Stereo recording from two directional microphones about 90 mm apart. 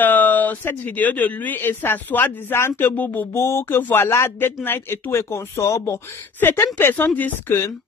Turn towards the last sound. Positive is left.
turn(degrees=20)  # may be behind; listen again after turning